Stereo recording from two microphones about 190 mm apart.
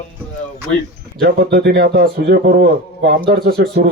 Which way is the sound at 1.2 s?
55° right (ahead or behind).